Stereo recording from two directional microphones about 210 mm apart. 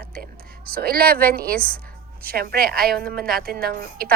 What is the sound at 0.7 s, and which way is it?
A woman's voice, 45° right (ahead or behind).